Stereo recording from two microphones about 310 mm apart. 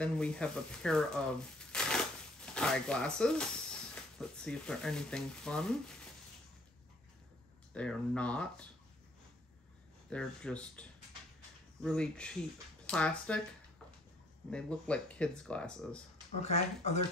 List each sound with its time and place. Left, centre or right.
0.0 s speech: centre
7.7 s speech: centre
10.0 s speech: centre
14.5 s speech: centre
16.3 s speech: left